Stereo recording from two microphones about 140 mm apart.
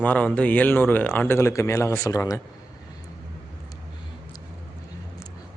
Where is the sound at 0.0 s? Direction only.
10° left (ahead or behind).